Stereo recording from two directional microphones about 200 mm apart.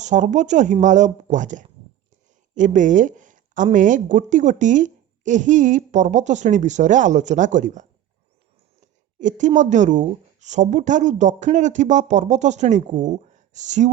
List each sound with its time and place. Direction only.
0.0 s speech: 35° right (ahead or behind)
9.1 s a woman's voice: 40° right (ahead or behind)